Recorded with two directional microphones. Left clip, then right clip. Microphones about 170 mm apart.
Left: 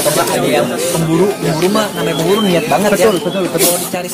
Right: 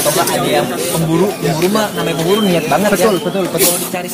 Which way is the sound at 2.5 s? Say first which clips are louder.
Left 1 dB; 5° right (ahead or behind).